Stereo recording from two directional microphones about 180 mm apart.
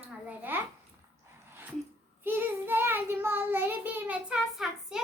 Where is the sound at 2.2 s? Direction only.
10° right (ahead or behind).